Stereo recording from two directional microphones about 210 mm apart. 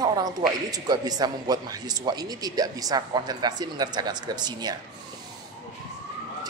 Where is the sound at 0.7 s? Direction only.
20° right (ahead or behind).